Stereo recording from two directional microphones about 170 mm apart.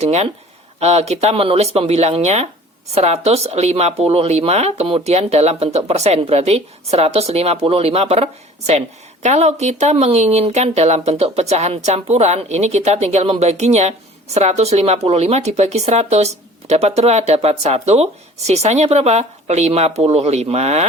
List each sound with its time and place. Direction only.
0.0 s speech: 40° right (ahead or behind)